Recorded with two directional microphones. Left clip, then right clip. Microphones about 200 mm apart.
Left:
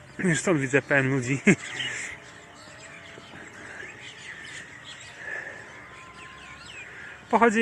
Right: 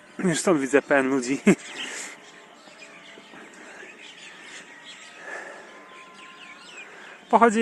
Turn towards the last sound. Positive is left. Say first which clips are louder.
# right 3 dB
turn(degrees=-10)  # may be behind; listen again after turning